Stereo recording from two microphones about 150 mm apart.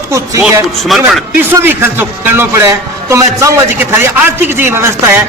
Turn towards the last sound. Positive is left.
turn(degrees=-15)  # may be behind; listen again after turning